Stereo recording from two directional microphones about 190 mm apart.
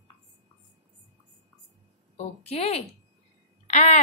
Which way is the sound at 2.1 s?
35° left (ahead or behind).